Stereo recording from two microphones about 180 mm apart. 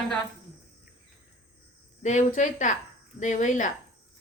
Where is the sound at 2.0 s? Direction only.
40° left (ahead or behind).